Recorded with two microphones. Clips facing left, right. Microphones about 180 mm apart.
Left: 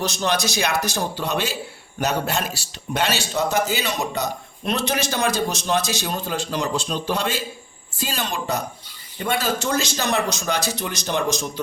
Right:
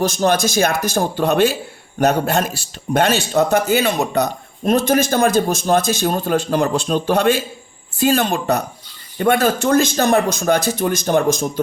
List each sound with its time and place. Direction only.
0.0 s a man's voice: 50° right (ahead or behind)
4.6 s a man's voice: 50° right (ahead or behind)